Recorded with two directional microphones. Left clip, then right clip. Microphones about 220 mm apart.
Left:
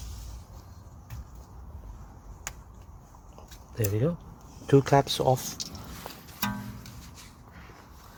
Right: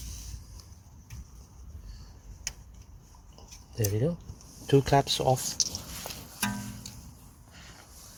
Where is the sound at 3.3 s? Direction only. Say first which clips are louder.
Left 1 dB; 15° right (ahead or behind).